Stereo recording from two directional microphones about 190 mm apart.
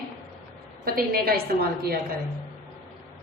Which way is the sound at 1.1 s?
55° right (ahead or behind).